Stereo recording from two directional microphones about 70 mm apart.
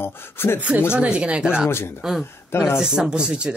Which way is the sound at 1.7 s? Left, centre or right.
Left.